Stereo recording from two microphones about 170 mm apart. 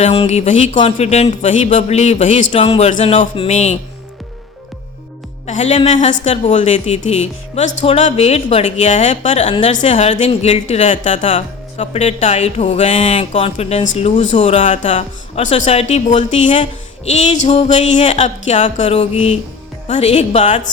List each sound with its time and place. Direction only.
0.0 s speech: 35° left (ahead or behind)
5.5 s speech: 45° left (ahead or behind)